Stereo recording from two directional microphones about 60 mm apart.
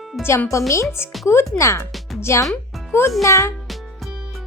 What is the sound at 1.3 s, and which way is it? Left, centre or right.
A child's voice, left.